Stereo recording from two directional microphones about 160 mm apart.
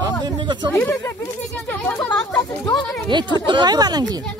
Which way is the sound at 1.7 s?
10° left (ahead or behind).